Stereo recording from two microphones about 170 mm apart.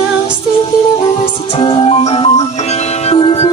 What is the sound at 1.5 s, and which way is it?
Music, 30° left (ahead or behind).